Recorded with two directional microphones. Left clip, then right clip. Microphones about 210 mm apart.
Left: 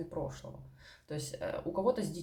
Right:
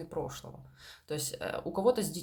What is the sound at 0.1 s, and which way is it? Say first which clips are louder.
Speech: right 6 dB; 40° right (ahead or behind).